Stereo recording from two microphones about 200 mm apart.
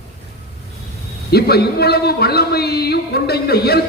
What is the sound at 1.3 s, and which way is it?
A man's voice, 50° left (ahead or behind).